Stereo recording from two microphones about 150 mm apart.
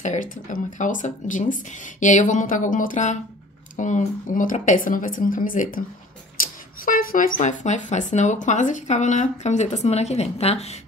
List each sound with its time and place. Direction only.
0.0 s speech: 60° left (ahead or behind)